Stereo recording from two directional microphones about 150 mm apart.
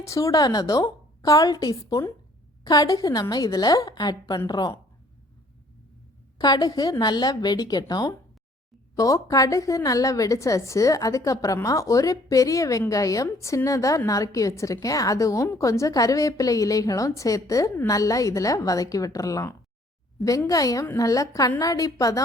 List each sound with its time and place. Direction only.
0.0 s a woman's voice: 20° left (ahead or behind)
6.4 s a woman's voice: 25° left (ahead or behind)